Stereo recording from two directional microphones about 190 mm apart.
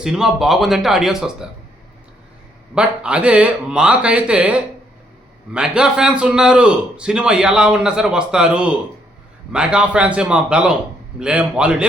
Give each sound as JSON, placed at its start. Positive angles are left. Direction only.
{"t": 0.0, "sound": "a man's voice", "side_deg": -5}
{"t": 2.7, "sound": "a man's voice", "side_deg": -5}